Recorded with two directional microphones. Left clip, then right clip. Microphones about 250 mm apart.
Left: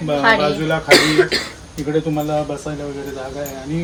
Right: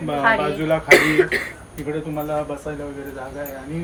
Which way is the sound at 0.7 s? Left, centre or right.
Centre.